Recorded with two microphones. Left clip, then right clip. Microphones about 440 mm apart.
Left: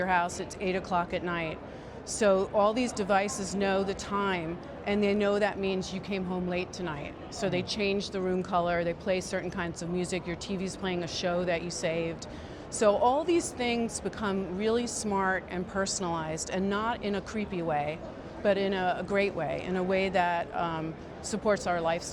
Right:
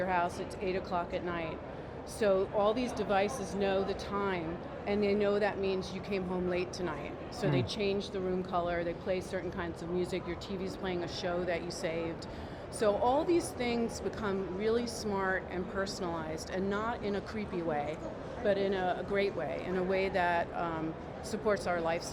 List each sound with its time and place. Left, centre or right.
0.0 s a woman's voice: left